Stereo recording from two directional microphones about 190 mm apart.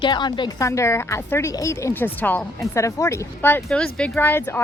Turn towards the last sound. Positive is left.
turn(degrees=10)  # may be behind; listen again after turning